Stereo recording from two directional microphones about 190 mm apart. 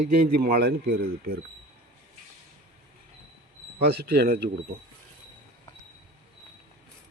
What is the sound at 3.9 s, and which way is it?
Speech, 55° right (ahead or behind).